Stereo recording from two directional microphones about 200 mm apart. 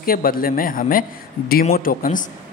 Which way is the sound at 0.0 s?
45° left (ahead or behind).